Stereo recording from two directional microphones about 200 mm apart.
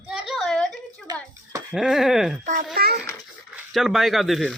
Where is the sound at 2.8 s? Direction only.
50° right (ahead or behind).